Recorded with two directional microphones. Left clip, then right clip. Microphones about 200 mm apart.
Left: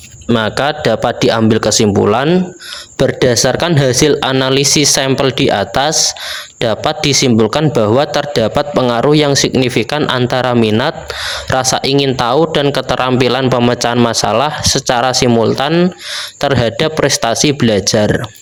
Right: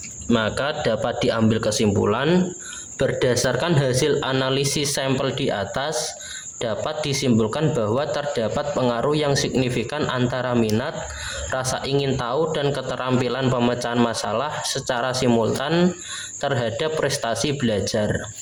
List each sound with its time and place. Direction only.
0.3 s speech: 40° left (ahead or behind)